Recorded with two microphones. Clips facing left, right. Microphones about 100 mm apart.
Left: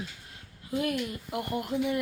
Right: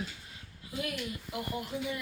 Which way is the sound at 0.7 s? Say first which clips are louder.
Left 7 dB; 45° left (ahead or behind).